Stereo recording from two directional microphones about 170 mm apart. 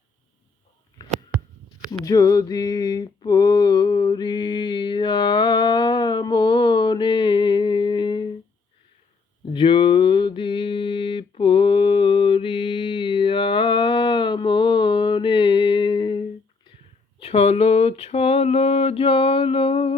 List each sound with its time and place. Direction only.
2.0 s mantra: 20° left (ahead or behind)
9.5 s mantra: 30° left (ahead or behind)
17.2 s a sound: 35° left (ahead or behind)